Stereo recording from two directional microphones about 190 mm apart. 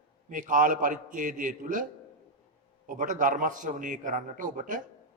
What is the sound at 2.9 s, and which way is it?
A man's voice, 45° right (ahead or behind).